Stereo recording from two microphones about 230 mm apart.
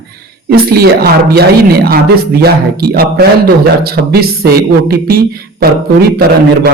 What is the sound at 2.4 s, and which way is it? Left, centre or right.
A man's voice, right.